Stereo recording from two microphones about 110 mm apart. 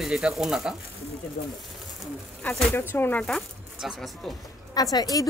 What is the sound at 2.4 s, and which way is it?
Speech, 15° left (ahead or behind).